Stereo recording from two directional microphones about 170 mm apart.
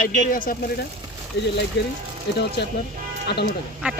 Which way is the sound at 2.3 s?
80° left.